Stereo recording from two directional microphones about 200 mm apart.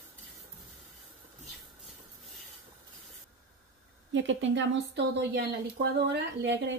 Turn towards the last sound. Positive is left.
turn(degrees=-60)  # may be behind; listen again after turning